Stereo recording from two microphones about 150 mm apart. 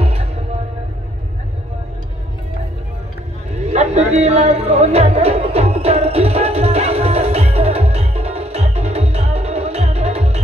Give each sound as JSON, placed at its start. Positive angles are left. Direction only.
{"t": 0.0, "sound": "music", "side_deg": -40}
{"t": 3.5, "sound": "a sound", "side_deg": -45}
{"t": 4.7, "sound": "music", "side_deg": -45}